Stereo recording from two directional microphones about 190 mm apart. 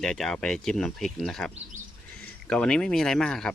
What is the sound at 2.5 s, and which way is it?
Speech, 5° left (ahead or behind).